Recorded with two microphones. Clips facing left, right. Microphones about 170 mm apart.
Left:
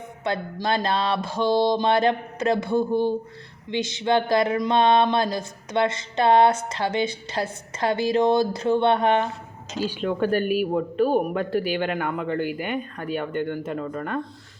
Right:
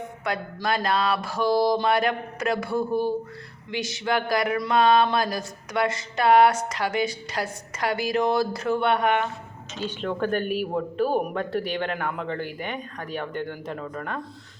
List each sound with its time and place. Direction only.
0.3 s speech: 25° left (ahead or behind)
9.9 s speech: 5° left (ahead or behind)